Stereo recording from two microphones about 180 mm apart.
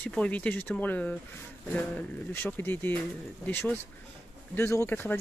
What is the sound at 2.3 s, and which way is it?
Speech, 10° left (ahead or behind).